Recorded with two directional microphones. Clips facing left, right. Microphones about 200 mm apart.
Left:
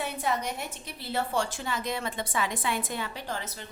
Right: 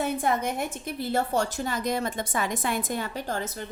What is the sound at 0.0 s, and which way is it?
A woman's voice, 50° right (ahead or behind).